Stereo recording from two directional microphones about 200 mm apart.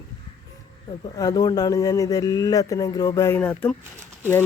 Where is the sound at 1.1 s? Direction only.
20° left (ahead or behind).